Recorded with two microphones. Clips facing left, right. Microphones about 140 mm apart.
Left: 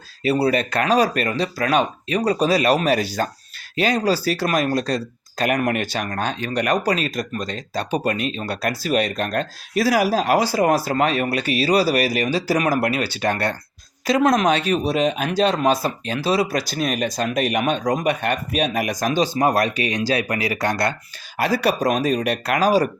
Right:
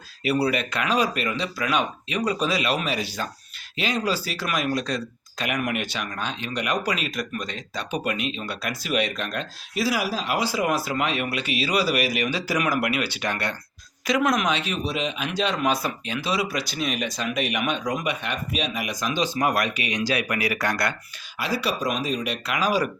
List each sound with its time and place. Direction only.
0.2 s speech: 30° left (ahead or behind)
21.3 s speech: 45° left (ahead or behind)